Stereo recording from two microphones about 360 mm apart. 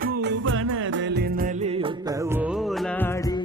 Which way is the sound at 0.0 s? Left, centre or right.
Right.